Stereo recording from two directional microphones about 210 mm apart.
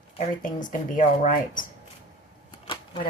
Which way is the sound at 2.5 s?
25° left (ahead or behind).